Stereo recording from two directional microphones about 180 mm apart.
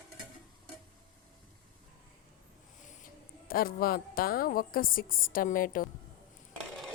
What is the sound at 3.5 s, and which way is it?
A woman's voice, 55° left (ahead or behind).